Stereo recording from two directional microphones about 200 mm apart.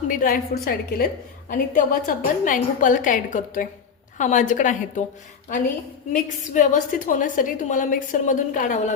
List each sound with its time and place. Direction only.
0.1 s a woman's voice: 45° left (ahead or behind)
6.5 s a woman's voice: 40° left (ahead or behind)